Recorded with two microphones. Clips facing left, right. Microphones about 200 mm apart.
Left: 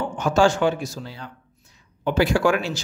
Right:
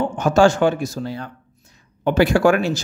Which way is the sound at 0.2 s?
50° right (ahead or behind).